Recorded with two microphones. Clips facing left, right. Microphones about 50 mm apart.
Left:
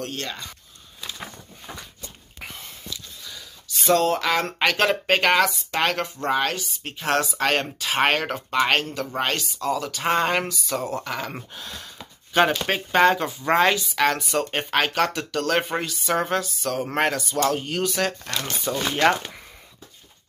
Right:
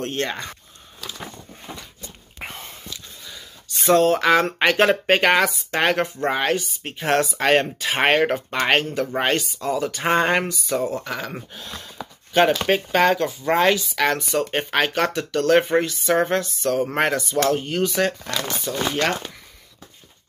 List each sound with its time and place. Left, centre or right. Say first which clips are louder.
0.0 s speech: right 6 dB; right
2.4 s whispering: right 3 dB; right
3.3 s a sound: right 1 dB; centre
4.2 s speech: right 5 dB; centre
18.3 s speech: right 1 dB; centre